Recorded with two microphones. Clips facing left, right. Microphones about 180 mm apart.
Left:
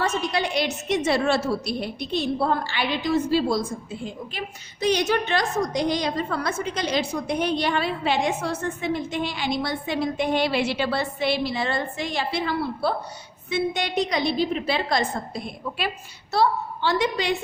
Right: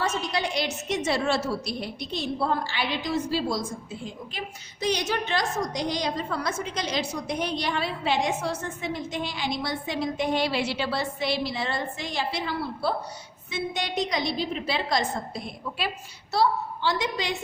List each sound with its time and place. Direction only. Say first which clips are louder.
0.0 s a woman's voice: left 3 dB; 60° left (ahead or behind)